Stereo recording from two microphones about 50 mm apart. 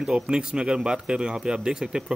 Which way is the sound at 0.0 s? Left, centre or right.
Centre.